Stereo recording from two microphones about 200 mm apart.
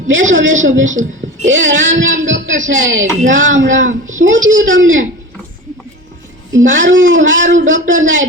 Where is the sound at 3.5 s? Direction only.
70° right (ahead or behind).